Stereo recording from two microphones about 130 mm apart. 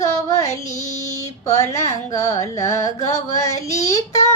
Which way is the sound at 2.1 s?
25° left (ahead or behind).